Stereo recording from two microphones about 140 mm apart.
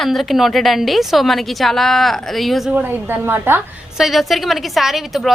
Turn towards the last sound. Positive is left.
turn(degrees=0)  # may be behind; listen again after turning